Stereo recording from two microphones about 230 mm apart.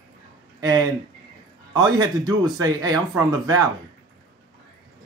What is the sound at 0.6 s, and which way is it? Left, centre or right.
Speech, centre.